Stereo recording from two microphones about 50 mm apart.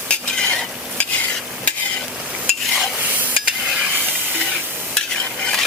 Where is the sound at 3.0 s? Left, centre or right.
Right.